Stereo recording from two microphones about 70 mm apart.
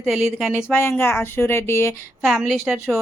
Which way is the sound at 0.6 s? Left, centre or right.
Left.